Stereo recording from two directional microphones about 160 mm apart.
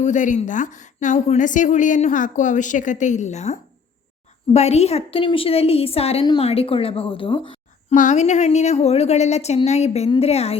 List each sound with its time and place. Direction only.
0.0 s a woman's voice: 50° left (ahead or behind); by 7.9 s 35° left (ahead or behind)
7.9 s a woman's voice: 50° left (ahead or behind)